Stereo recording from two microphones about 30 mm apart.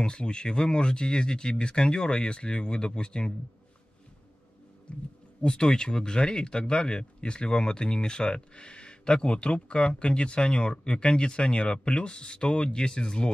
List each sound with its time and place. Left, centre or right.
0.2 s speech: left
4.9 s speech: left
5.5 s speech: left